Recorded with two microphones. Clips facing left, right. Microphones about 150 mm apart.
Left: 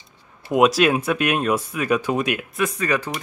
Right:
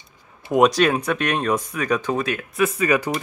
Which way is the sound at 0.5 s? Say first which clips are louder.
Even; 5° left (ahead or behind).